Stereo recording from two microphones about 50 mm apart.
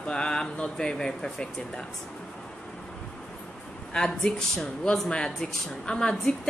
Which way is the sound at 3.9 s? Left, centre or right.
Centre.